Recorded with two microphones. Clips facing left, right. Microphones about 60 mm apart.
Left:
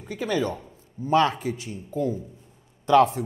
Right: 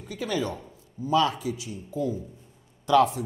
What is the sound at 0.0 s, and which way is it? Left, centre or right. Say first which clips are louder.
Speech: left 3 dB; left.